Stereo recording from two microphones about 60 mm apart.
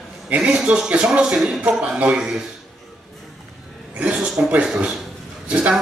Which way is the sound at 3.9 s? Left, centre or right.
Centre.